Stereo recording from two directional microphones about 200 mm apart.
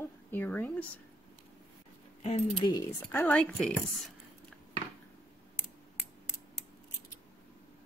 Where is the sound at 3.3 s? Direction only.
Centre (ahead or behind).